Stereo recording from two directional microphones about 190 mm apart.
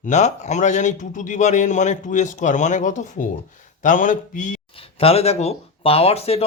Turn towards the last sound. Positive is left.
turn(degrees=30)  # may be behind; listen again after turning